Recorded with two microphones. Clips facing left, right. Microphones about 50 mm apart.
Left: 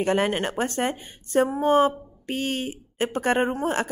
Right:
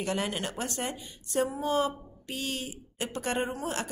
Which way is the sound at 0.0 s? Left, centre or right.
Left.